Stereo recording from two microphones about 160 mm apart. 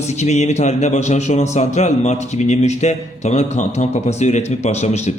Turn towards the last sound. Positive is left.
turn(degrees=45)  # may be behind; listen again after turning